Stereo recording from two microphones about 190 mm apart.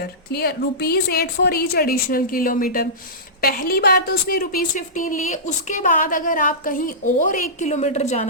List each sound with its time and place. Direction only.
0.0 s a woman's voice: 55° left (ahead or behind); by 8.3 s 35° left (ahead or behind)